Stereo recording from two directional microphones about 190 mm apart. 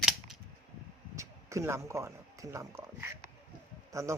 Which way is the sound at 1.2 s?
15° right (ahead or behind).